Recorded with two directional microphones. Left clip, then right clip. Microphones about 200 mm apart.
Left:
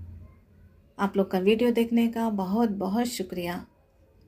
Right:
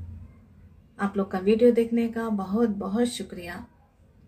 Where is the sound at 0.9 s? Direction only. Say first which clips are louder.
Left 2 dB; 35° left (ahead or behind).